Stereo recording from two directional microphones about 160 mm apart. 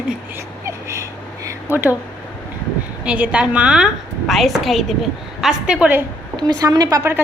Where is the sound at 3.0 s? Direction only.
5° right (ahead or behind).